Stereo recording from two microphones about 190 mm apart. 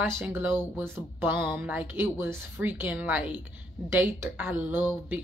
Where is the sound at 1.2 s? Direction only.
10° right (ahead or behind).